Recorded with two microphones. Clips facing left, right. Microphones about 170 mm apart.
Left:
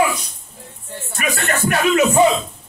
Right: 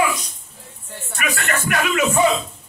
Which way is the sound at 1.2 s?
30° left (ahead or behind).